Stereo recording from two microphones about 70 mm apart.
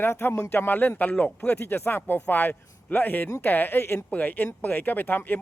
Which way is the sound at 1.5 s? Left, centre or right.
Left.